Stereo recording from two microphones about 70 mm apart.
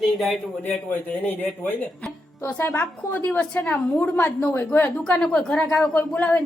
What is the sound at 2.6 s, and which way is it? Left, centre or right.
A woman's voice, left.